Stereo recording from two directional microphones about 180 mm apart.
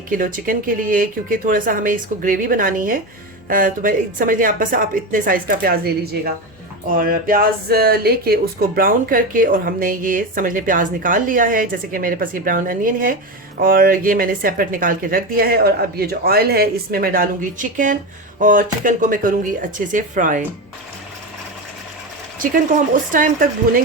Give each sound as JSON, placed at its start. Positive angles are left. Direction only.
{"t": 0.1, "sound": "speech", "side_deg": -50}
{"t": 23.1, "sound": "speech", "side_deg": -50}